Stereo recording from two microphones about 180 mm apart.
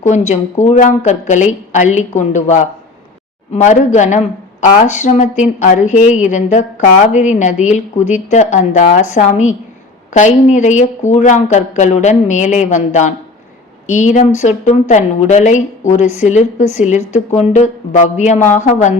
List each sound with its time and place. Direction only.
0.3 s a woman's voice: 40° left (ahead or behind)